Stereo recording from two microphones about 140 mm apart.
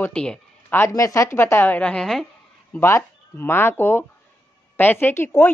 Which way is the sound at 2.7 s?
20° left (ahead or behind).